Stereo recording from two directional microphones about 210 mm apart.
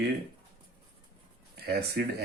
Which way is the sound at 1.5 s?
50° right (ahead or behind).